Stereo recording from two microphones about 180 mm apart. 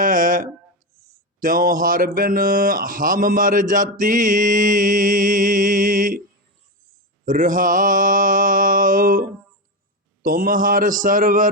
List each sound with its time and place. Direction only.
0.0 s a sound: 50° right (ahead or behind)
1.4 s mantra: 50° right (ahead or behind)
7.3 s mantra: 50° right (ahead or behind)
10.2 s mantra: 50° right (ahead or behind)